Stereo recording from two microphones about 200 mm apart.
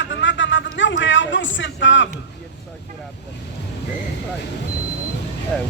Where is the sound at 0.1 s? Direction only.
65° left (ahead or behind).